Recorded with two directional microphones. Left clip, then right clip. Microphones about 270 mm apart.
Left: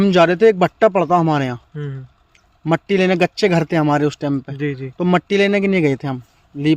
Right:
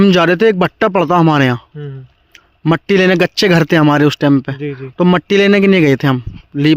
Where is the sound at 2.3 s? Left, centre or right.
Right.